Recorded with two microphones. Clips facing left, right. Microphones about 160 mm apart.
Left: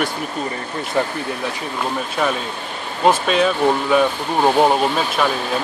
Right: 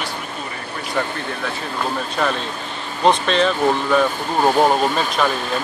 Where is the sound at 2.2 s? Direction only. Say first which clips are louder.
Left 1 dB; 5° left (ahead or behind).